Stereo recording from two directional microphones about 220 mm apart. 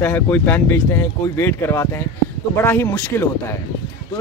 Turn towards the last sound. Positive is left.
turn(degrees=10)  # may be behind; listen again after turning